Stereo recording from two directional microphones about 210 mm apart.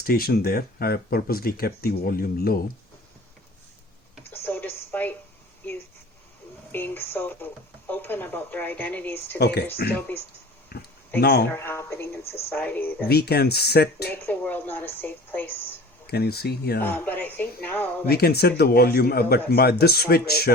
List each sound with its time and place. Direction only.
0.0 s speech: 45° left (ahead or behind)
4.3 s a sound: 10° left (ahead or behind)
6.7 s speech: 10° left (ahead or behind)
9.4 s speech: 50° left (ahead or behind)
10.7 s a sound: 50° left (ahead or behind)
11.2 s speech: 50° left (ahead or behind)
11.5 s a woman's voice: 10° left (ahead or behind)
13.1 s speech: 50° left (ahead or behind)
14.3 s a woman's voice: 10° left (ahead or behind)
16.0 s speech: 50° left (ahead or behind)
16.8 s a woman's voice: 10° left (ahead or behind)
18.1 s speech: 50° left (ahead or behind)